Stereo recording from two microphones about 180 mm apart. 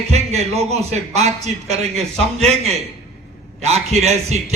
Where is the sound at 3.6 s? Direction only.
35° right (ahead or behind).